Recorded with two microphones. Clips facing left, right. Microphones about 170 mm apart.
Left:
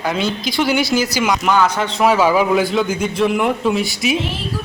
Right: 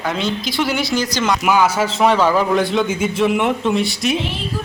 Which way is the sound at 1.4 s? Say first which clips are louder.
Right 2 dB; 10° right (ahead or behind).